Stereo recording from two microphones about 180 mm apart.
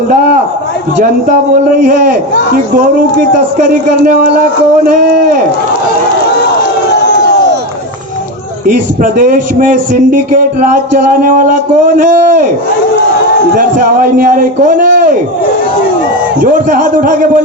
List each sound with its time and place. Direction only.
1.8 s a man's voice: 50° right (ahead or behind)
3.6 s a man's voice: 45° right (ahead or behind)
8.6 s a man's voice: 50° right (ahead or behind)
13.6 s a man's voice: 50° right (ahead or behind)
16.4 s a man's voice: 50° right (ahead or behind)